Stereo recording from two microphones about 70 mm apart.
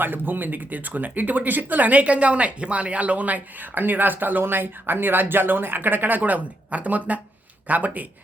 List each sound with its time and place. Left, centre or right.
0.0 s speech: right